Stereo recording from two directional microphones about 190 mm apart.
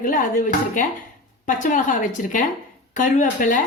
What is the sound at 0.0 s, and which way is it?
A woman's voice, 45° left (ahead or behind).